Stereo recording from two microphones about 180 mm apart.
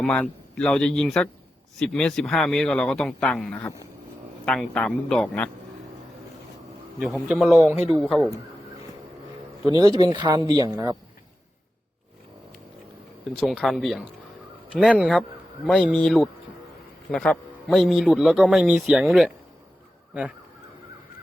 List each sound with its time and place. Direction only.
0.0 s a man's voice: 5° left (ahead or behind)
7.0 s a man's voice: 5° right (ahead or behind)
9.7 s speech: 25° right (ahead or behind)
13.4 s a man's voice: centre (ahead or behind)